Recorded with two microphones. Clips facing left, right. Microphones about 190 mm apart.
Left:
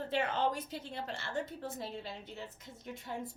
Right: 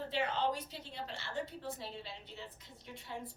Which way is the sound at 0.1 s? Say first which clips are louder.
Left 2 dB; 50° left (ahead or behind).